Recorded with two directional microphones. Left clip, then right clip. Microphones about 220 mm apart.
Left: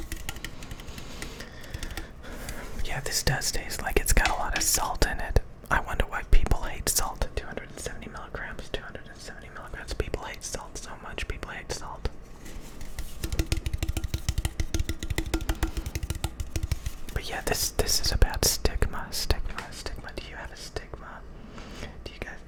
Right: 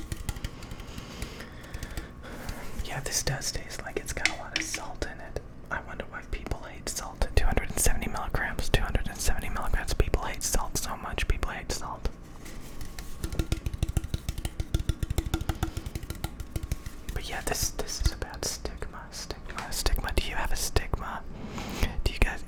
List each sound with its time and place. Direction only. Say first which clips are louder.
2.4 s whispering: left 2 dB; 5° left (ahead or behind)
7.3 s speech: right 6 dB; 15° right (ahead or behind)
8.8 s speech: right 7 dB; 25° right (ahead or behind); by 12.1 s 5° right (ahead or behind)
13.2 s vehicle: left 3 dB; 35° left (ahead or behind)
17.2 s speech: left 3 dB; 15° left (ahead or behind)
17.7 s speech: left 8 dB; 30° left (ahead or behind)
18.1 s whispering: left 8 dB; 25° left (ahead or behind)
19.7 s whispering: right 7 dB; 15° right (ahead or behind)